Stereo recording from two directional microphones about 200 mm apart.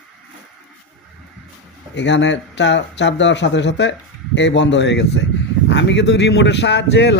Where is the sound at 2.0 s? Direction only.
60° left (ahead or behind).